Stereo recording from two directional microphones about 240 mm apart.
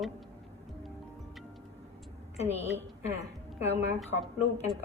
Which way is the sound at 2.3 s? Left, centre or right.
Left.